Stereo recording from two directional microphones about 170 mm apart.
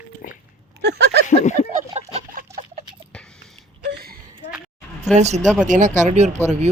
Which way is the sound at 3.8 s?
65° right (ahead or behind).